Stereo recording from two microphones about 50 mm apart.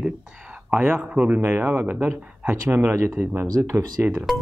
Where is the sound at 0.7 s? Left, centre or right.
Right.